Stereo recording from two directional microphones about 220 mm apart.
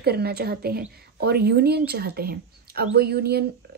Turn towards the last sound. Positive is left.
turn(degrees=-45)  # may be behind; listen again after turning